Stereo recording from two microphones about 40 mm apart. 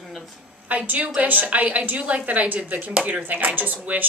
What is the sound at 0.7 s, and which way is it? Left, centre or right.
A woman's voice, right.